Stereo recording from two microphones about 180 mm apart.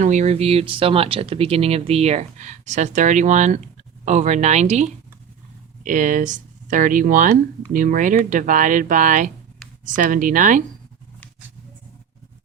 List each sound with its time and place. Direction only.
0.0 s speech: 40° right (ahead or behind)